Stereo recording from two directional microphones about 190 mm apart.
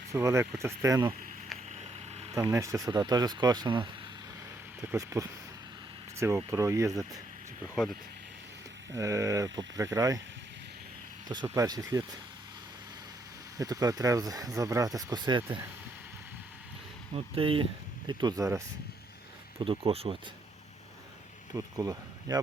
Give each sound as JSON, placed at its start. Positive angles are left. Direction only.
{"t": 0.1, "sound": "speech", "side_deg": -15}
{"t": 2.3, "sound": "speech", "side_deg": -15}
{"t": 8.9, "sound": "speech", "side_deg": -15}
{"t": 11.4, "sound": "speech", "side_deg": -20}
{"t": 13.6, "sound": "speech", "side_deg": -20}
{"t": 17.2, "sound": "speech", "side_deg": -30}
{"t": 19.6, "sound": "speech", "side_deg": -30}
{"t": 21.5, "sound": "speech", "side_deg": -20}